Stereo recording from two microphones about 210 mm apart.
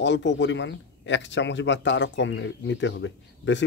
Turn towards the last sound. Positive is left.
turn(degrees=60)  # may be behind; listen again after turning